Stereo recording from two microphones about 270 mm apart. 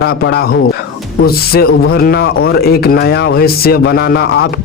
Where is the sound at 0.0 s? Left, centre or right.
Left.